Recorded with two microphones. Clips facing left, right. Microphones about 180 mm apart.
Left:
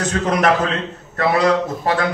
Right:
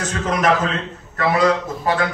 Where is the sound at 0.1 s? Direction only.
35° left (ahead or behind).